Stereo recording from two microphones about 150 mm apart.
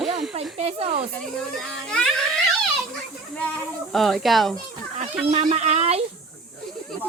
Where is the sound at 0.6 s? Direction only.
40° right (ahead or behind).